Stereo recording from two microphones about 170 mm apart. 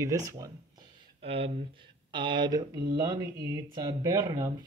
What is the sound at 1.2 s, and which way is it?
Speech, 35° right (ahead or behind).